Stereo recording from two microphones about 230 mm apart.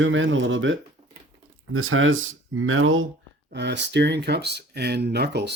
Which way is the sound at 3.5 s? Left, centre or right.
Right.